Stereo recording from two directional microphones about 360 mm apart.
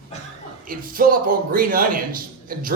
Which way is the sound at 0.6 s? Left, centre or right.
Right.